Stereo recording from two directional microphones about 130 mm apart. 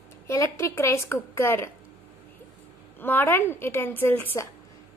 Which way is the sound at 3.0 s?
15° left (ahead or behind).